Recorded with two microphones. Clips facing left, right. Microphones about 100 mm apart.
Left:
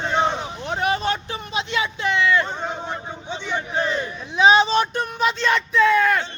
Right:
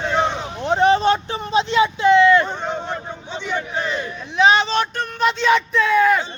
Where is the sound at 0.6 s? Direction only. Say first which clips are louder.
Right 8 dB; 30° right (ahead or behind).